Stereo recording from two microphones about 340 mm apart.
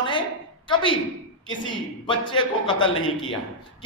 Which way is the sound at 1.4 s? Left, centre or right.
Left.